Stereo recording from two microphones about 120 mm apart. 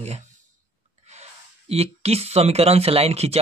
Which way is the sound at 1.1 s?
60° right (ahead or behind).